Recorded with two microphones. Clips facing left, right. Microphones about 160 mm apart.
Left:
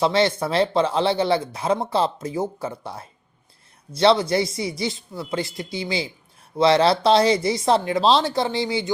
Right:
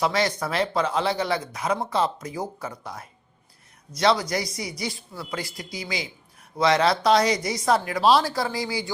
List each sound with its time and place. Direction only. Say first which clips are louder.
0.0 s speech: left 4 dB; 30° left (ahead or behind)